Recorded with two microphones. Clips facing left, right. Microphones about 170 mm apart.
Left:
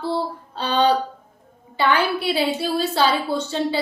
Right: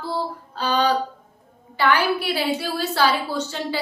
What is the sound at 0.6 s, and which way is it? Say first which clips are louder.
A woman's voice: left 2 dB; 30° left (ahead or behind).